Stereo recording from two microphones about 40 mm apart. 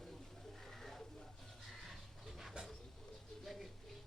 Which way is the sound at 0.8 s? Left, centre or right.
Centre.